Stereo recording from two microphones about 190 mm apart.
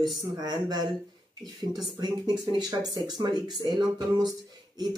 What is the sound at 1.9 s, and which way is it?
Speech, 20° right (ahead or behind).